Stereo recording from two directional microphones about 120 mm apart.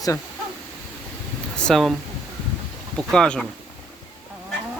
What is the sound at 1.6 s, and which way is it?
Speech, 5° left (ahead or behind).